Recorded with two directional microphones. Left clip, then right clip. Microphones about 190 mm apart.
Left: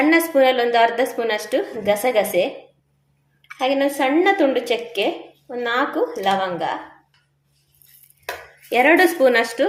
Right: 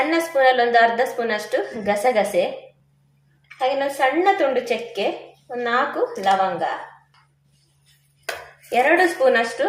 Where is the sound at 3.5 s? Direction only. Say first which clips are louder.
Left 1 dB; 40° left (ahead or behind).